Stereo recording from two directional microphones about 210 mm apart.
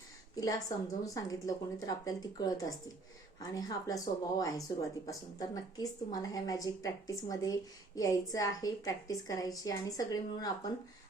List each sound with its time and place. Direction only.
0.3 s a woman's voice: 15° left (ahead or behind)